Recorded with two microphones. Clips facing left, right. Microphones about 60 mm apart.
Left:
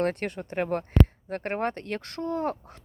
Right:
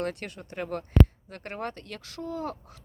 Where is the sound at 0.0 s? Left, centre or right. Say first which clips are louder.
Left 5 dB; left.